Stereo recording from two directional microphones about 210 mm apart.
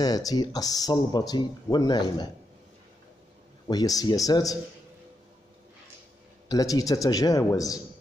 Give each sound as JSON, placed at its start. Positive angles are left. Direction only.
{"t": 0.0, "sound": "speech", "side_deg": 20}
{"t": 3.6, "sound": "a man's voice", "side_deg": 15}
{"t": 6.5, "sound": "a man's voice", "side_deg": 15}